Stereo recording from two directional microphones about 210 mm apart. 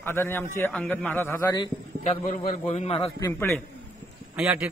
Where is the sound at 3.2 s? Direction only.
10° left (ahead or behind).